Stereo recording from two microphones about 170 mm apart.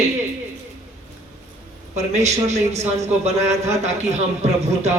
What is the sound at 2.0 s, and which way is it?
Speech, 40° right (ahead or behind).